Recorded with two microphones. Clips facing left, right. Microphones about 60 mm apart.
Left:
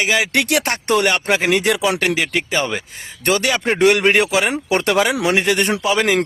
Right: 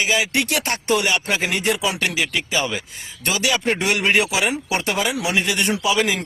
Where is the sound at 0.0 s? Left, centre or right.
Left.